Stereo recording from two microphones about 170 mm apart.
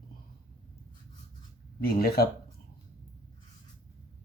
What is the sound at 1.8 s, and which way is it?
Speech, 65° left (ahead or behind).